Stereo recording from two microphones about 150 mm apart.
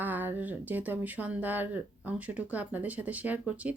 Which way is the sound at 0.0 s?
10° right (ahead or behind).